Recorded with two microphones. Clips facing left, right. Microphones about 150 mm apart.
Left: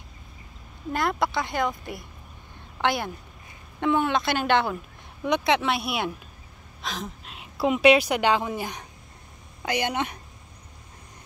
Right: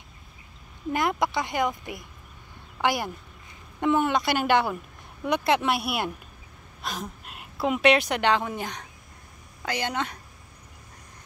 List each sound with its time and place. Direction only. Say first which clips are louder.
0.9 s a woman's voice: even; 15° right (ahead or behind); by 10.1 s 15° left (ahead or behind)